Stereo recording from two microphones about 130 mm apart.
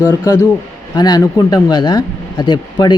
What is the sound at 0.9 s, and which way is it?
Speech, 30° left (ahead or behind).